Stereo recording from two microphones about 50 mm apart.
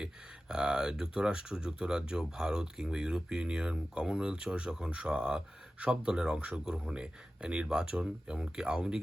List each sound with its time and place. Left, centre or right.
0.0 s speech: centre